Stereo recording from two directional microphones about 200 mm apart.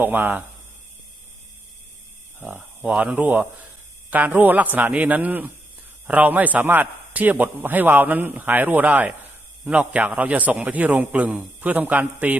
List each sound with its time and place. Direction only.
0.0 s a man's voice: 10° right (ahead or behind)
2.4 s a man's voice: 10° right (ahead or behind)